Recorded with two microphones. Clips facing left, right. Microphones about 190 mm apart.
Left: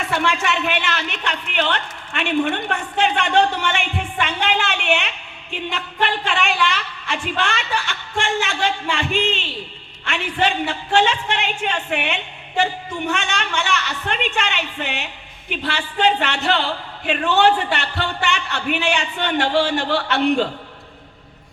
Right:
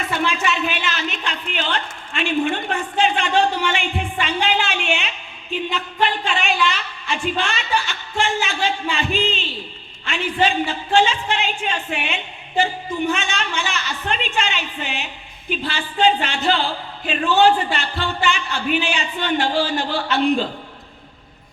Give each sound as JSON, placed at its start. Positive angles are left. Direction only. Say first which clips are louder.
{"t": 0.1, "sound": "a woman's voice", "louder": "left 1 dB", "side_deg": 65}